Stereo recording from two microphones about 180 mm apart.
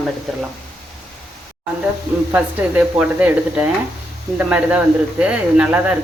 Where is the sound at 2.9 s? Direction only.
5° right (ahead or behind).